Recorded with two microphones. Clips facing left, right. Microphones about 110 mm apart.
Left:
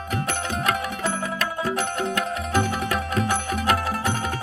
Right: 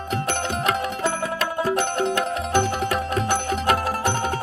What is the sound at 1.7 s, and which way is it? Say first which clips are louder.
Music: right 3 dB; 30° right (ahead or behind).